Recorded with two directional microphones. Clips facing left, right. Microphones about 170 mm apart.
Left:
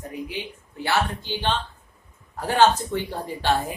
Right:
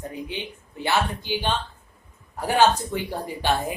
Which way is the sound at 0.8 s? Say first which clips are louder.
Even; 15° right (ahead or behind).